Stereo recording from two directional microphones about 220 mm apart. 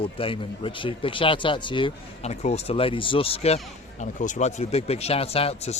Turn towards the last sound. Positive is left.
turn(degrees=30)  # may be behind; listen again after turning